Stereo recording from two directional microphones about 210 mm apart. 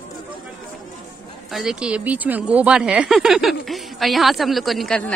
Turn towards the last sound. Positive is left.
turn(degrees=0)  # may be behind; listen again after turning